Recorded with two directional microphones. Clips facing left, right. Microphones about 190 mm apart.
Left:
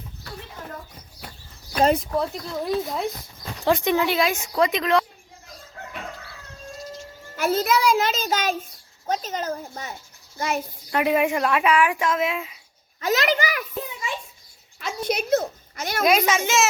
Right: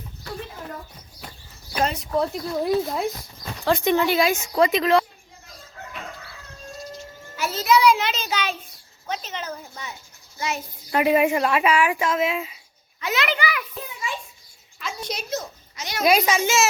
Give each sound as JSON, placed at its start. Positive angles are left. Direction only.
{"t": 2.0, "sound": "speech", "side_deg": 0}
{"t": 7.3, "sound": "a child's voice", "side_deg": 55}
{"t": 10.9, "sound": "speech", "side_deg": 0}
{"t": 13.0, "sound": "a child's voice", "side_deg": 40}
{"t": 14.8, "sound": "a sound", "side_deg": 55}
{"t": 16.0, "sound": "speech", "side_deg": 0}